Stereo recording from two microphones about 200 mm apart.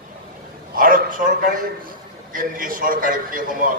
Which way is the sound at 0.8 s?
45° right (ahead or behind).